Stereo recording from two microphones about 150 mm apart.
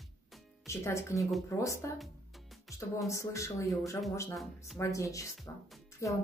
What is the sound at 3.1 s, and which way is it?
Speech, 20° left (ahead or behind).